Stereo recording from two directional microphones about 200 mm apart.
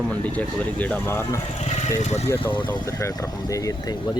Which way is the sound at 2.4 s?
25° left (ahead or behind).